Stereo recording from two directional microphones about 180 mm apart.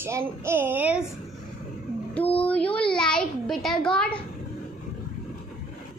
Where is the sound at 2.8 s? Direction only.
5° left (ahead or behind).